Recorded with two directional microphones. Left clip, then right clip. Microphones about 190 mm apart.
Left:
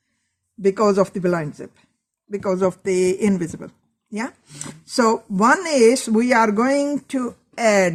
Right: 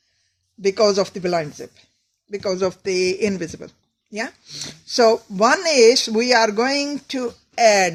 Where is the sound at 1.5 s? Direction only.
55° left (ahead or behind).